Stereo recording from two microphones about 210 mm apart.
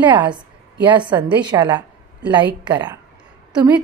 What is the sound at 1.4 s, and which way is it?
A woman's voice, 20° right (ahead or behind).